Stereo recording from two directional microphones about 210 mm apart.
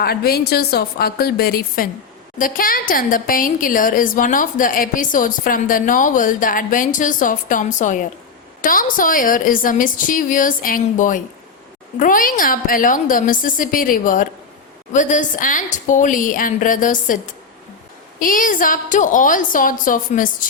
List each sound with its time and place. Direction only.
0.0 s a woman's voice: 50° left (ahead or behind)
18.2 s a woman's voice: 40° left (ahead or behind)